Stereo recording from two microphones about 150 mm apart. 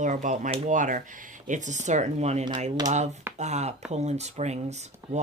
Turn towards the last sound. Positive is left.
turn(degrees=-50)  # may be behind; listen again after turning